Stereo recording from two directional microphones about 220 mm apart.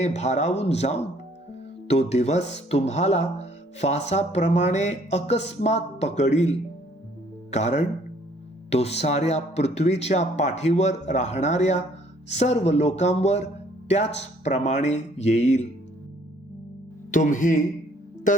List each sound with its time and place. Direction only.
0.0 s speech: 30° left (ahead or behind)
17.1 s speech: 35° left (ahead or behind)
18.3 s music: 35° left (ahead or behind)